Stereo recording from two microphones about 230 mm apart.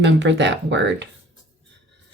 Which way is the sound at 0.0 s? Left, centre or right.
Right.